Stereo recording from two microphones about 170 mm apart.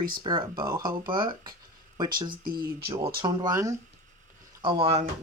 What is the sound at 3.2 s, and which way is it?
Speech, 20° right (ahead or behind).